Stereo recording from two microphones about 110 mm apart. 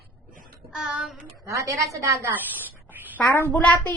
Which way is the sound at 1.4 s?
30° right (ahead or behind).